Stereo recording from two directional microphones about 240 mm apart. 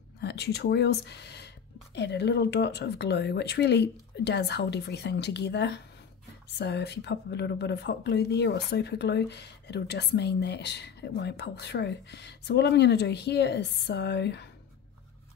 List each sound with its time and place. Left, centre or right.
0.2 s speech: left